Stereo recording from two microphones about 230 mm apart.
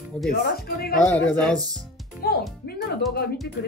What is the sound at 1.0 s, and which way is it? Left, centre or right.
Speech, centre.